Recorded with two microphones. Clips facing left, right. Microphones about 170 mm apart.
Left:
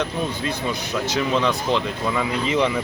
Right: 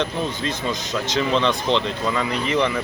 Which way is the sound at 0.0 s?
10° left (ahead or behind).